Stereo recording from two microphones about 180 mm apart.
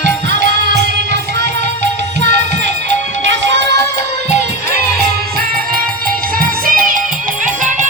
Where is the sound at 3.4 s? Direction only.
75° right (ahead or behind).